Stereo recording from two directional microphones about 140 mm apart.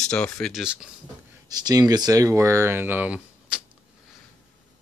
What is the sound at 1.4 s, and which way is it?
Speech, 30° right (ahead or behind).